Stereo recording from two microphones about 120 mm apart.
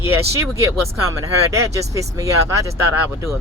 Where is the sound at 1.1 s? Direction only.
25° right (ahead or behind).